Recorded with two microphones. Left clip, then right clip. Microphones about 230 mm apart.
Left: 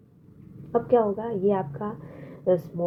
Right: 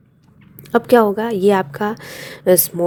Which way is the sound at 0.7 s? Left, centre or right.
Right.